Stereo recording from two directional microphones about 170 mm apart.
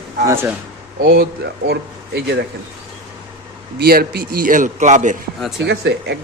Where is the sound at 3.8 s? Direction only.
65° right (ahead or behind); by 5.1 s 45° right (ahead or behind).